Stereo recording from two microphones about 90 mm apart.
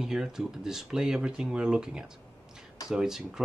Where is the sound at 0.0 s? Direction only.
5° right (ahead or behind).